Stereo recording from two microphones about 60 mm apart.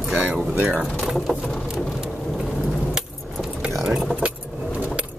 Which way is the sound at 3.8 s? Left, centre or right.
Centre.